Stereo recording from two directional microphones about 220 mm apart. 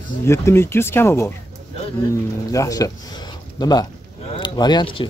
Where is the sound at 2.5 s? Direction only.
15° left (ahead or behind).